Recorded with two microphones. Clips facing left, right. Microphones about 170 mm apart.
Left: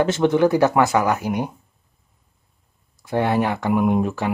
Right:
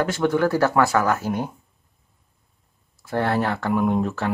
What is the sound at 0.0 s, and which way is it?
Speech, 20° left (ahead or behind).